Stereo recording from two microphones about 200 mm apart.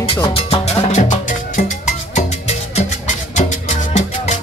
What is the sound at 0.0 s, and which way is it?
Music, 25° left (ahead or behind).